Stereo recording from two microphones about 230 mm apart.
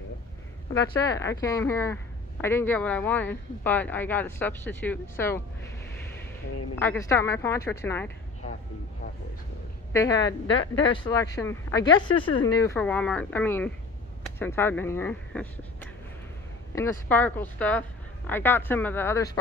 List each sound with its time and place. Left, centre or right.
1.0 s speech: centre
6.8 s speech: centre
9.9 s speech: centre
10.5 s speech: left
10.9 s speech: centre